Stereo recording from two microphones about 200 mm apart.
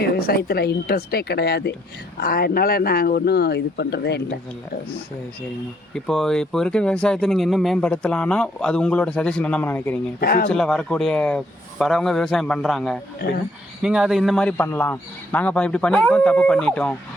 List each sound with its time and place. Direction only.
0.0 s speech: 50° left (ahead or behind)
5.9 s speech: centre (ahead or behind)
10.2 s speech: 50° left (ahead or behind)
10.5 s speech: 5° left (ahead or behind)
13.2 s speech: 50° left (ahead or behind)
13.8 s speech: 5° right (ahead or behind)